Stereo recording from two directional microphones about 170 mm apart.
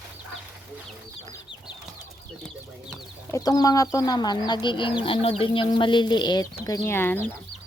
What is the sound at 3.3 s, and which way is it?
Speech, 20° left (ahead or behind).